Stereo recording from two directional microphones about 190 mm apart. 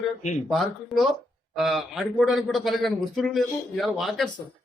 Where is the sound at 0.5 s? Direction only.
Centre (ahead or behind).